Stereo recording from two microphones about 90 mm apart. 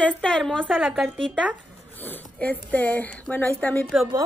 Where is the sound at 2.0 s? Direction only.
20° left (ahead or behind).